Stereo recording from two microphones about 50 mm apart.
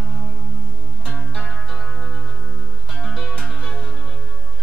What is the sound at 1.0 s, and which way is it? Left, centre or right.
Music, centre.